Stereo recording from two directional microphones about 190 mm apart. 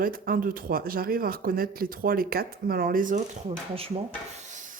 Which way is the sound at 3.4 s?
30° right (ahead or behind).